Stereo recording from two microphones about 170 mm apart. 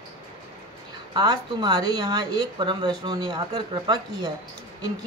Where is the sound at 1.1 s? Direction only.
25° right (ahead or behind).